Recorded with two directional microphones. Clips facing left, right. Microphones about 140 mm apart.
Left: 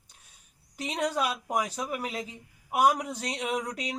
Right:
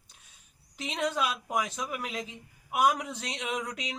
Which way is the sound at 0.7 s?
40° left (ahead or behind).